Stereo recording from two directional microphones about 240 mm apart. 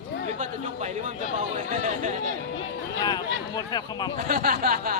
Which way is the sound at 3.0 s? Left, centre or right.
Centre.